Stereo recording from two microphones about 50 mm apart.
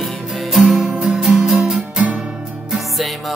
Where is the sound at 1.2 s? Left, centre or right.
Centre.